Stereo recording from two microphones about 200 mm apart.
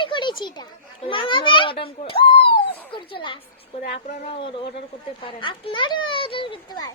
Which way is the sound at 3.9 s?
35° left (ahead or behind).